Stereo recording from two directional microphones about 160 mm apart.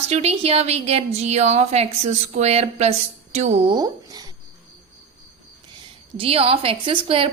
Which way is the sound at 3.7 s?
25° right (ahead or behind).